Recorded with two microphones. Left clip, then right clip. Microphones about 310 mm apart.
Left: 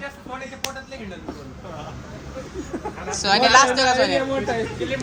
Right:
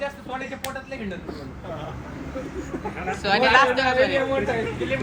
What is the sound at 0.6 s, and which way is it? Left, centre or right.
Speech, centre.